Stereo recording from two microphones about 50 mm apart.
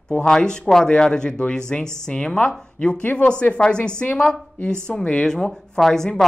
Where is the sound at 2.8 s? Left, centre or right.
Left.